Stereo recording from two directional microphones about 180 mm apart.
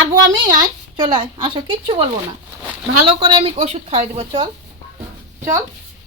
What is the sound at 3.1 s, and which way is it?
A child's voice, 25° right (ahead or behind).